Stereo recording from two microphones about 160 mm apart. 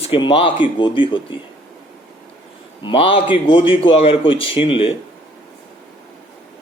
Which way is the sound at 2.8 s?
35° left (ahead or behind).